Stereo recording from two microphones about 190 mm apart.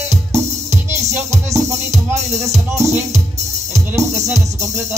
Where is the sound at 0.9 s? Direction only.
15° right (ahead or behind).